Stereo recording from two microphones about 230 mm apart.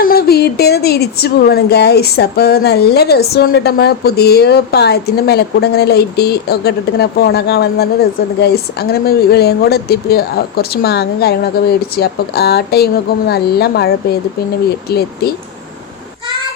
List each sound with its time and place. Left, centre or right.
0.0 s speech: left